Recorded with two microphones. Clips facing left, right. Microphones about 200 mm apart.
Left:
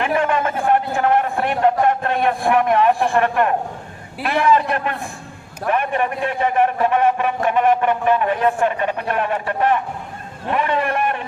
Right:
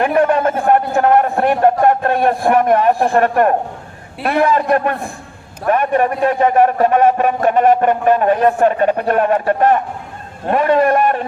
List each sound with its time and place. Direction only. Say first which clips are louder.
0.0 s a man's voice: right 6 dB; 40° right (ahead or behind)